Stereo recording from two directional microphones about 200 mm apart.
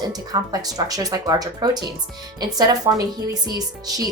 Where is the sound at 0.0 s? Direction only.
20° right (ahead or behind).